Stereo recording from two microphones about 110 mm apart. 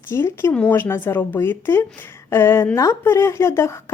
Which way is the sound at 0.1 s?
25° left (ahead or behind).